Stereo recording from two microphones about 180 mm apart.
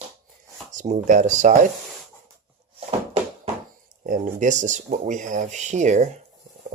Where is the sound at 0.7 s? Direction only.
45° right (ahead or behind).